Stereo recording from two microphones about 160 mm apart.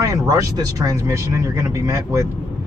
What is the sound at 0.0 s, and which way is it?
Speech, 20° right (ahead or behind).